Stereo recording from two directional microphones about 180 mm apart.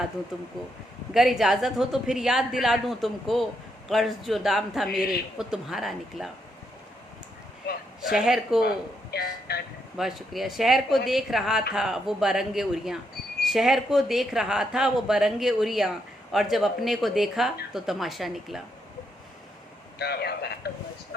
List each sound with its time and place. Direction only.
0.3 s speech: centre (ahead or behind)
8.1 s speech: 5° right (ahead or behind)
9.5 s speech: 60° left (ahead or behind)
10.0 s speech: centre (ahead or behind)
20.0 s speech: 60° left (ahead or behind)